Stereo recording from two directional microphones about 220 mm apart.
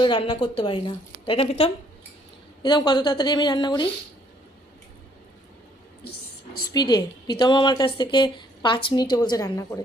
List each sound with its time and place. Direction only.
0.0 s a woman's voice: 20° left (ahead or behind)
6.7 s a woman's voice: 20° left (ahead or behind)